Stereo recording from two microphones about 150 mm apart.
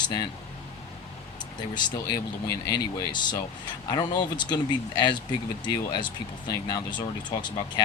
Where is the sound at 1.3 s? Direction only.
30° left (ahead or behind).